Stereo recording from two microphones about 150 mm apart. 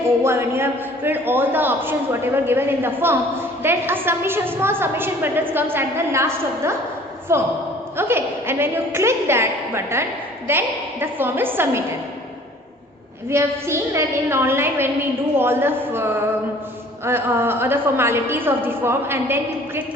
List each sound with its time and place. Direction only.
0.2 s a woman's voice: 15° right (ahead or behind)
13.3 s a woman's voice: 15° right (ahead or behind)